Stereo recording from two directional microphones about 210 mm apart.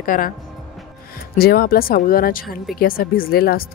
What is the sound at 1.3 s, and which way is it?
Speech, 45° left (ahead or behind).